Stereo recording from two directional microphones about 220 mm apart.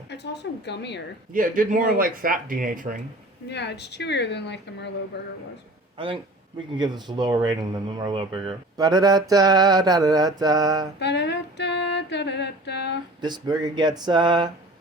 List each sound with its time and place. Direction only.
0.1 s a woman's voice: 50° left (ahead or behind)
1.3 s speech: 40° right (ahead or behind)
3.5 s a woman's voice: 50° left (ahead or behind)
6.7 s speech: 20° right (ahead or behind)
11.0 s a sound: 50° left (ahead or behind)
13.2 s speech: 20° right (ahead or behind)